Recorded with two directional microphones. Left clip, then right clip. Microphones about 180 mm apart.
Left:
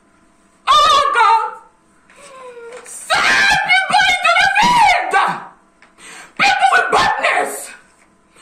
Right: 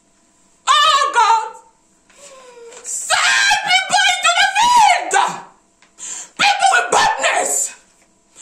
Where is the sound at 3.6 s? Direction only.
25° right (ahead or behind).